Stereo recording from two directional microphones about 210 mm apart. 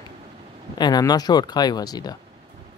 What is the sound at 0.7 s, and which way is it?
Speech, 20° left (ahead or behind).